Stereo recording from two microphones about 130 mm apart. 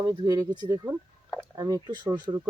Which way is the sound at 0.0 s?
35° right (ahead or behind).